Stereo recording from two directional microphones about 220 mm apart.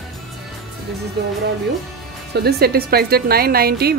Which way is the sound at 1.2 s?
50° right (ahead or behind).